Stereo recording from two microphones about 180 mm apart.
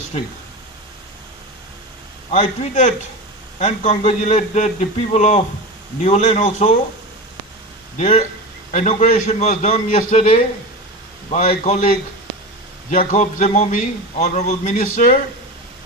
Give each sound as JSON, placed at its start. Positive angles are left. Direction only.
{"t": 0.1, "sound": "a man's voice", "side_deg": 40}
{"t": 2.3, "sound": "a man's voice", "side_deg": 35}
{"t": 7.9, "sound": "a man's voice", "side_deg": 35}
{"t": 12.9, "sound": "a man's voice", "side_deg": 40}